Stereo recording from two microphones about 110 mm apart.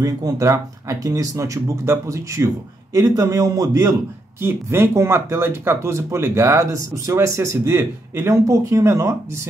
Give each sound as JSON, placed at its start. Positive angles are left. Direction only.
{"t": 0.0, "sound": "speech", "side_deg": -30}